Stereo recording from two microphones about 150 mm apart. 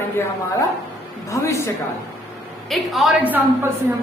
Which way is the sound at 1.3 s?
20° left (ahead or behind).